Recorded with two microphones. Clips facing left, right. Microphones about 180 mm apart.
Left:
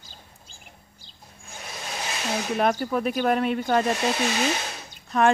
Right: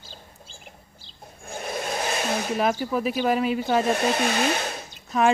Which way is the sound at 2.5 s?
Centre (ahead or behind).